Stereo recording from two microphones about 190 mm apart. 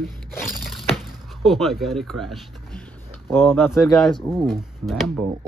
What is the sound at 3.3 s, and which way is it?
Speech, 10° left (ahead or behind).